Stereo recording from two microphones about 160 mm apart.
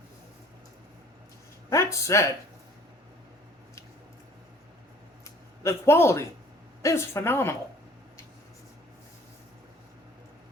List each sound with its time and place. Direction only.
1.7 s speech: 20° left (ahead or behind)
5.6 s a woman's voice: 15° left (ahead or behind)